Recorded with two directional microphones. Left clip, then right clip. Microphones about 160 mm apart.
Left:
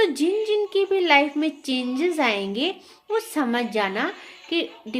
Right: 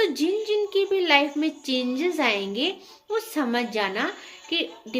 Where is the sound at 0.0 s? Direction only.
50° left (ahead or behind).